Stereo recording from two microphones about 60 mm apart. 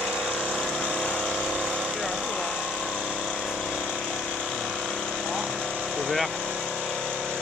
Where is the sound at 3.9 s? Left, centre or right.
Centre.